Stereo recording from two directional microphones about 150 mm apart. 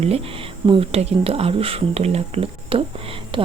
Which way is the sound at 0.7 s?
40° right (ahead or behind).